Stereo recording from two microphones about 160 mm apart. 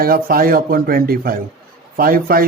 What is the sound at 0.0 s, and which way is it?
Speech, 65° right (ahead or behind).